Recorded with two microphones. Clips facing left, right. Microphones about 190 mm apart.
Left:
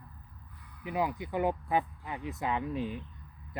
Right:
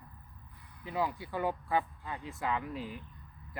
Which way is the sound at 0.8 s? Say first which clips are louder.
Left 2 dB; 15° left (ahead or behind).